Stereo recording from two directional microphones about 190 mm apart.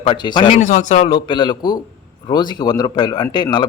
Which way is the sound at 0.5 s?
40° left (ahead or behind).